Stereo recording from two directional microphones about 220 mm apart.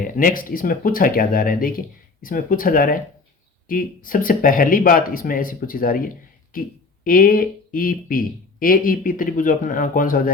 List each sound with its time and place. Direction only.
0.0 s speech: 40° left (ahead or behind)